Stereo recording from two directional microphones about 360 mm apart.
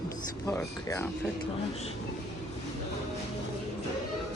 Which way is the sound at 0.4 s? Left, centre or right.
Centre.